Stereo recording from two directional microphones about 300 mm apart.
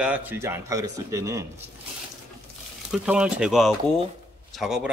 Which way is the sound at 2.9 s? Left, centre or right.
Centre.